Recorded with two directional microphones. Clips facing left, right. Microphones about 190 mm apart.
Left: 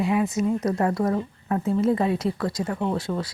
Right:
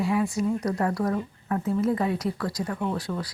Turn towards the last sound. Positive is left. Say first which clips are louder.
# left 3 dB
turn(degrees=25)  # may be behind; listen again after turning